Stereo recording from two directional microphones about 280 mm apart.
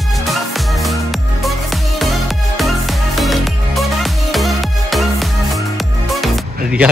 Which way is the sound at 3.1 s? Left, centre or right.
Centre.